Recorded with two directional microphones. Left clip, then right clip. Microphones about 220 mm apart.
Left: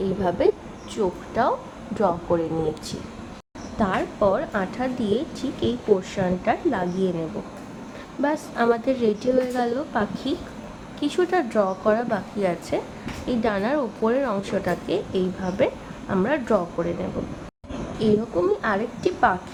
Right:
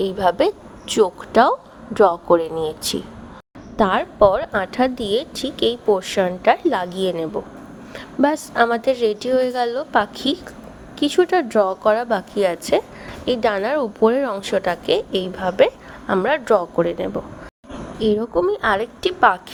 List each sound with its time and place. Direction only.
0.0 s speech: 40° right (ahead or behind)
17.7 s a sound: centre (ahead or behind)
18.3 s speech: 40° right (ahead or behind)